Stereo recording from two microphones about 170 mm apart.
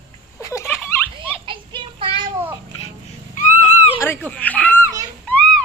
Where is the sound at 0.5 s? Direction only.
15° left (ahead or behind).